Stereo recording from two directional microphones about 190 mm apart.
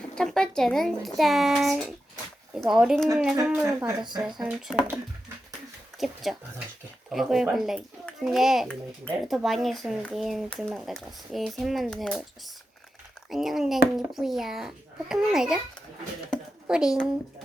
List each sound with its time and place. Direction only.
0.2 s a child's voice: 5° left (ahead or behind)
3.3 s speech: 15° right (ahead or behind)
4.4 s a child's voice: centre (ahead or behind)
5.9 s a sound: centre (ahead or behind)
7.1 s a child's voice: centre (ahead or behind)
13.3 s a child's voice: centre (ahead or behind)
16.3 s a sound: 5° right (ahead or behind)